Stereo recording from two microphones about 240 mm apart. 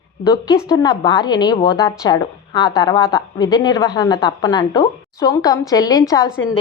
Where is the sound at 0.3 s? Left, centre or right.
Centre.